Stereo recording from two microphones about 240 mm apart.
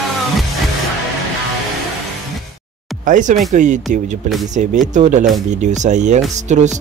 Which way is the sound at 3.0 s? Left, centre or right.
Right.